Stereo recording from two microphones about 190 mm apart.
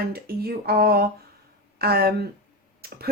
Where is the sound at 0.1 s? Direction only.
55° right (ahead or behind).